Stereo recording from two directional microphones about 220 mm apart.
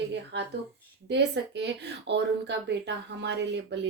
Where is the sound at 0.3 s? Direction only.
50° right (ahead or behind).